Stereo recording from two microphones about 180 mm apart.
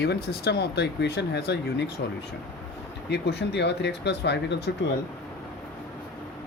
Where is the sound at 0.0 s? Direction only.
65° left (ahead or behind).